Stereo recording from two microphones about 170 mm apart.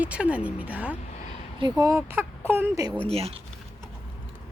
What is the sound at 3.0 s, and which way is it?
Speech, 35° right (ahead or behind).